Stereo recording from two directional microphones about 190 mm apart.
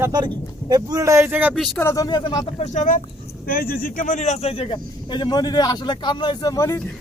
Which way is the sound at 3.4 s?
50° left (ahead or behind).